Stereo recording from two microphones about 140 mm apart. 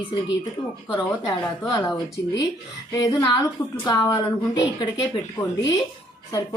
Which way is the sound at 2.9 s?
25° left (ahead or behind).